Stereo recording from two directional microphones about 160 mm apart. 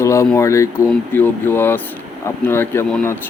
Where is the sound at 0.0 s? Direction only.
20° left (ahead or behind).